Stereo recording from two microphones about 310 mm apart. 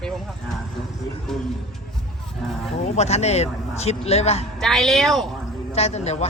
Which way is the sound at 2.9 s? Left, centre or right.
Left.